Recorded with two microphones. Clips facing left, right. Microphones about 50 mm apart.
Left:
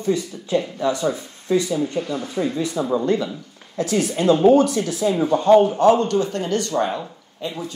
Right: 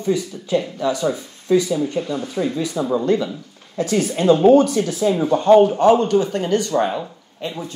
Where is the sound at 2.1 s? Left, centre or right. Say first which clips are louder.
Right 1 dB; left.